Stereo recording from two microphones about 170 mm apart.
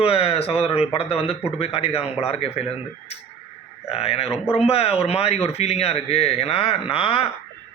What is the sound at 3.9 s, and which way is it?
A man's voice, 35° left (ahead or behind).